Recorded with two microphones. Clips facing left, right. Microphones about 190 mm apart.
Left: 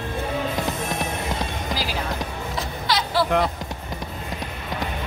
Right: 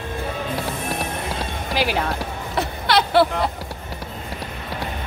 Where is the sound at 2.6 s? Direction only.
65° right (ahead or behind).